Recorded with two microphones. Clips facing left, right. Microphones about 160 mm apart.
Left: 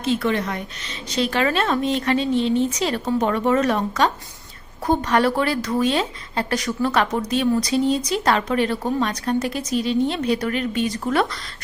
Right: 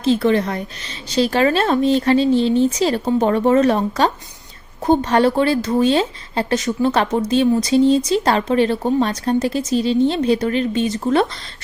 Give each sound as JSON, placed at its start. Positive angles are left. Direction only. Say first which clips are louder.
{"t": 0.0, "sound": "speech", "louder": "right 5 dB", "side_deg": -30}